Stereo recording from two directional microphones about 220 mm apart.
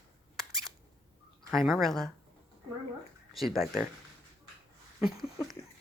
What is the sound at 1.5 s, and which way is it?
Speech, centre (ahead or behind).